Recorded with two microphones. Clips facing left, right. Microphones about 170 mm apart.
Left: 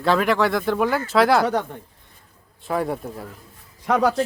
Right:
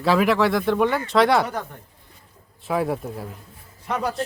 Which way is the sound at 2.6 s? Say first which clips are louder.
Right 1 dB; centre (ahead or behind).